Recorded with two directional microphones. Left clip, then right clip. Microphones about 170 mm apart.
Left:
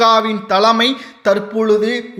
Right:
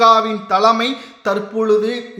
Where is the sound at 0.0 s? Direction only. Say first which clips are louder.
Right 1 dB; 20° left (ahead or behind).